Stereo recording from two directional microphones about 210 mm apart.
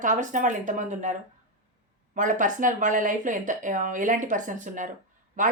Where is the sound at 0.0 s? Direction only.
35° right (ahead or behind).